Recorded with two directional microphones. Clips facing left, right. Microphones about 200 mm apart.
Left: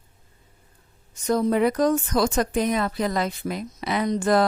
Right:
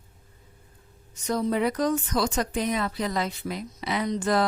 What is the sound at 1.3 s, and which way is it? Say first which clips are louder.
Speech: left 4 dB; 50° left (ahead or behind).